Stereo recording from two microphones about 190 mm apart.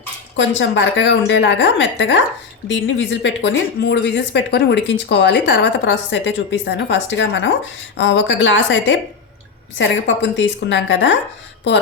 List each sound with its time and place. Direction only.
0.3 s speech: 70° left (ahead or behind)